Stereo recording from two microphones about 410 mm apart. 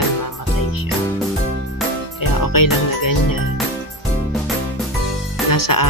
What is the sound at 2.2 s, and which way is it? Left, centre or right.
Music, left.